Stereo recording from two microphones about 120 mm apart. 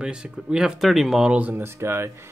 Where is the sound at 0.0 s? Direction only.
5° right (ahead or behind).